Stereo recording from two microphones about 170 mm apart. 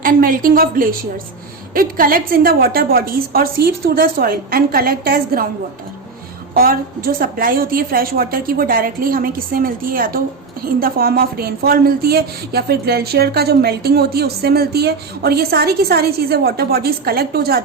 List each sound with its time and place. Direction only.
0.0 s speech: 55° right (ahead or behind)
6.5 s speech: 60° right (ahead or behind)